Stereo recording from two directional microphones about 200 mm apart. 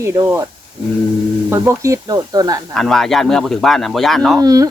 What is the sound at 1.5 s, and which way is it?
Speech, 15° right (ahead or behind).